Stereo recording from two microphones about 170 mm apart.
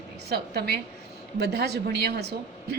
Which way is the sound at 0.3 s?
70° right (ahead or behind).